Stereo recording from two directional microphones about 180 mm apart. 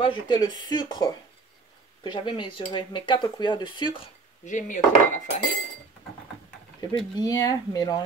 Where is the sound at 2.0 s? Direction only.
25° left (ahead or behind).